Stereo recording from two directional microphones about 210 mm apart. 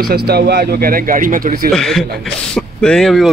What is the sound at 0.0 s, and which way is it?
Speech, 45° right (ahead or behind).